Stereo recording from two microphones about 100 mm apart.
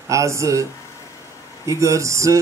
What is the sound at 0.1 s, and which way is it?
Speech, 30° right (ahead or behind).